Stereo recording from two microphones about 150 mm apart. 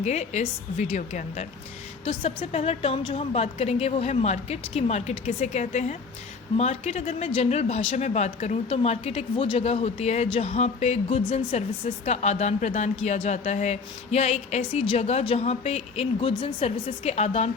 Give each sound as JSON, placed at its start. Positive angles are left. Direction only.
{"t": 0.0, "sound": "a woman's voice", "side_deg": 50}
{"t": 2.0, "sound": "a woman's voice", "side_deg": 35}